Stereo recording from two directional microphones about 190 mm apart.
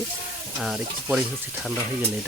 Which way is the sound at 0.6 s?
Centre (ahead or behind).